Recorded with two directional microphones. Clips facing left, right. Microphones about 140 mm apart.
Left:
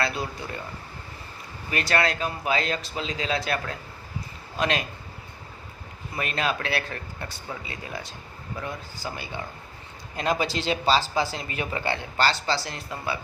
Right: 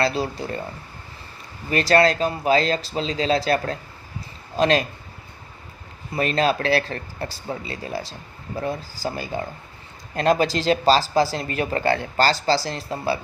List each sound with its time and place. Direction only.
0.0 s speech: 30° right (ahead or behind)
1.7 s a man's voice: 35° right (ahead or behind)
6.1 s speech: 35° right (ahead or behind)